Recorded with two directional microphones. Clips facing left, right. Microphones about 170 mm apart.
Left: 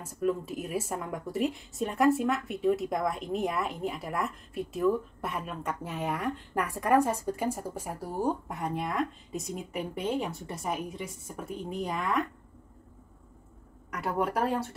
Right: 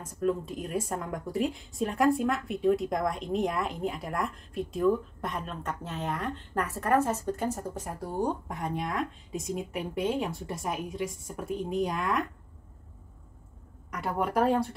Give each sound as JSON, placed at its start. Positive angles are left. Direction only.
{"t": 0.0, "sound": "speech", "side_deg": 5}
{"t": 13.9, "sound": "speech", "side_deg": 0}